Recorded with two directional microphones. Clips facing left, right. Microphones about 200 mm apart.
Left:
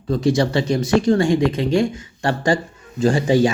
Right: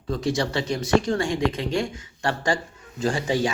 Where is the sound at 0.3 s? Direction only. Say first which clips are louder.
Left 7 dB; 35° left (ahead or behind).